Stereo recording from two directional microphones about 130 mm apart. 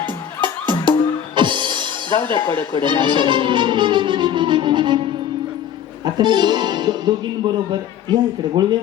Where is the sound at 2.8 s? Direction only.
35° right (ahead or behind).